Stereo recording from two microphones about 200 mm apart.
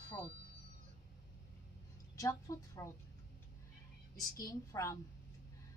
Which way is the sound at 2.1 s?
15° left (ahead or behind).